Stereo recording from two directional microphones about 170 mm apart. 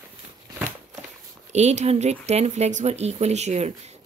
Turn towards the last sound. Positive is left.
turn(degrees=-40)  # may be behind; listen again after turning